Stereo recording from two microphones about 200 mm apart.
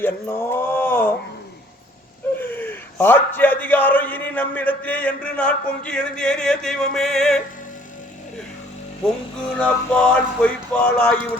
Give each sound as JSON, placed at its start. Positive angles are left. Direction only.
{"t": 0.0, "sound": "mantra", "side_deg": 10}
{"t": 2.4, "sound": "a man's voice", "side_deg": 10}
{"t": 9.6, "sound": "music", "side_deg": 5}